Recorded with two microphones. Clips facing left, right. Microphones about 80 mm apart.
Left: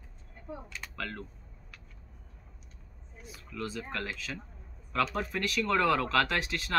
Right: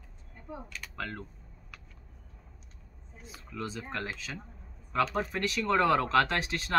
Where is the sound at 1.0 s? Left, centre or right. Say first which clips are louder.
Right 1 dB; centre.